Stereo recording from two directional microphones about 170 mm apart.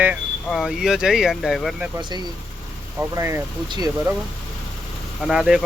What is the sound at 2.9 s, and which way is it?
Speech, 15° right (ahead or behind).